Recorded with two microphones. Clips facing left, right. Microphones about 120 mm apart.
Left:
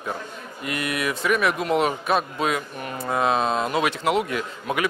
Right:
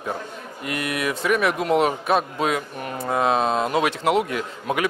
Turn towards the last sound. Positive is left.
turn(degrees=-45)  # may be behind; listen again after turning